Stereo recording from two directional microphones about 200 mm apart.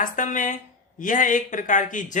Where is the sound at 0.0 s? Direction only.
40° left (ahead or behind).